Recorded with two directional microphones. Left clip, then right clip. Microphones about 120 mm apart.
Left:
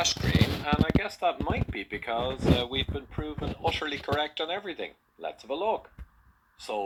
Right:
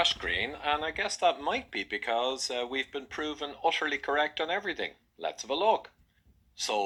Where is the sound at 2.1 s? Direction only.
35° right (ahead or behind).